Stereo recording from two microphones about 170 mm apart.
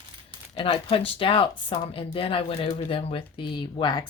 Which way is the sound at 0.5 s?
30° left (ahead or behind).